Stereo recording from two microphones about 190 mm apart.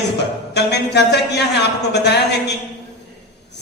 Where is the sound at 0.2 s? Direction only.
60° left (ahead or behind).